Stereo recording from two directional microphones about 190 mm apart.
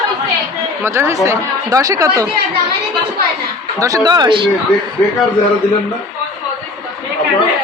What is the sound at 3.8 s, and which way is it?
Speech, 20° right (ahead or behind).